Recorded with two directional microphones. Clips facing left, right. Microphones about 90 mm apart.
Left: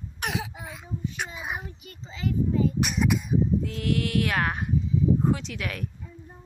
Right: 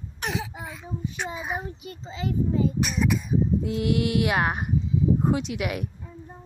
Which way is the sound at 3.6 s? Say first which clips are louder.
Right 3 dB; 20° right (ahead or behind).